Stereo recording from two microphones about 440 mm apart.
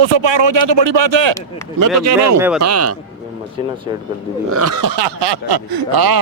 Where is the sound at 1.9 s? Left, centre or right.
Right.